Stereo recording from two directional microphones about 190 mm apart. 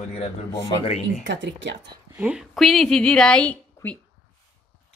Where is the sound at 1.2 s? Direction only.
70° right (ahead or behind).